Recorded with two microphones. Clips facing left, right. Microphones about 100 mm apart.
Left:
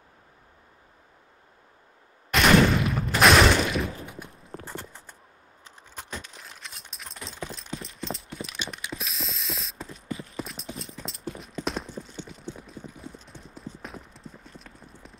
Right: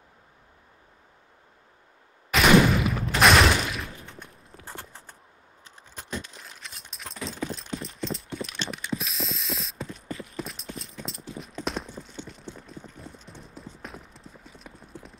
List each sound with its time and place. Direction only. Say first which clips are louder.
2.3 s a sound: right 1 dB; 5° right (ahead or behind)
4.5 s clip-clop: left 9 dB; 40° left (ahead or behind)
6.4 s a sound: even; centre (ahead or behind)
7.3 s clip-clop: right 2 dB; centre (ahead or behind)
8.6 s mechanisms: right 4 dB; centre (ahead or behind)
10.3 s clip-clop: even; centre (ahead or behind)